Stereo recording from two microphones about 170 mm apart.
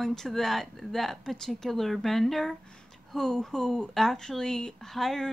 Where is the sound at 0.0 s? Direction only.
Centre (ahead or behind).